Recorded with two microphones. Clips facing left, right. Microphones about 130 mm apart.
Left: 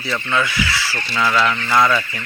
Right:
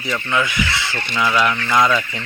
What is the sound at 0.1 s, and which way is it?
Speech, 15° right (ahead or behind).